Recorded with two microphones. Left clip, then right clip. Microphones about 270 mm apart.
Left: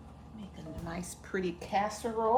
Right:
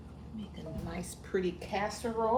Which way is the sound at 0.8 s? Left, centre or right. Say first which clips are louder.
Left 1 dB; centre.